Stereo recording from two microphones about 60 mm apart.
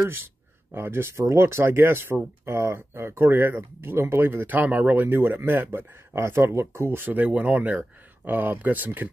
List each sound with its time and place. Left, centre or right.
0.0 s speech: right
1.1 s speech: right
4.5 s speech: right
6.1 s speech: right
7.1 s speech: right